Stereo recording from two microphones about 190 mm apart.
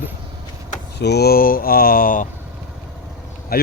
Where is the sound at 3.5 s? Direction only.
50° left (ahead or behind).